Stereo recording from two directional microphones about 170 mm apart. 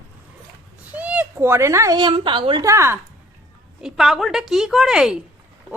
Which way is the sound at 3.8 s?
Centre (ahead or behind).